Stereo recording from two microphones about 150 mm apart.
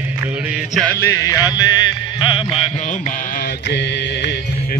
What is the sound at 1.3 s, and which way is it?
Music, 20° left (ahead or behind).